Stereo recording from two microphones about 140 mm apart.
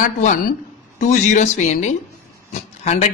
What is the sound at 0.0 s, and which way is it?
Speech, 70° left (ahead or behind).